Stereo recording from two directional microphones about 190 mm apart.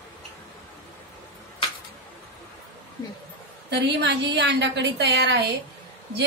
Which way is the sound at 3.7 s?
60° right (ahead or behind).